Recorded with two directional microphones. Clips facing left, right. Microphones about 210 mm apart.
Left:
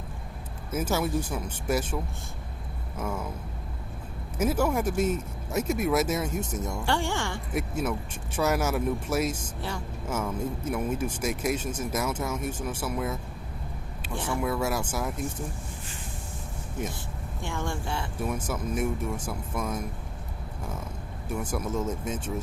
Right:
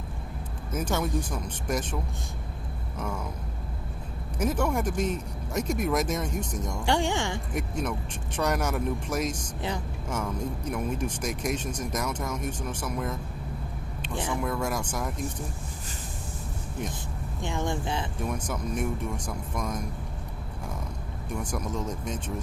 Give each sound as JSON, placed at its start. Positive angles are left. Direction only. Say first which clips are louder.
{"t": 0.7, "sound": "speech", "louder": "left 1 dB", "side_deg": 5}
{"t": 3.0, "sound": "speech", "louder": "left 2 dB", "side_deg": 5}
{"t": 4.4, "sound": "speech", "louder": "left 1 dB", "side_deg": 5}
{"t": 6.7, "sound": "a woman's voice", "louder": "right 3 dB", "side_deg": -15}
{"t": 7.5, "sound": "speech", "louder": "left 5 dB", "side_deg": 5}
{"t": 9.6, "sound": "speech", "louder": "right 2 dB", "side_deg": -20}
{"t": 10.1, "sound": "speech", "louder": "left 1 dB", "side_deg": 5}
{"t": 14.4, "sound": "speech", "louder": "left 2 dB", "side_deg": 5}
{"t": 17.4, "sound": "a woman's voice", "louder": "right 3 dB", "side_deg": -20}
{"t": 18.3, "sound": "speech", "louder": "left 2 dB", "side_deg": 5}
{"t": 21.2, "sound": "speech", "louder": "left 2 dB", "side_deg": 5}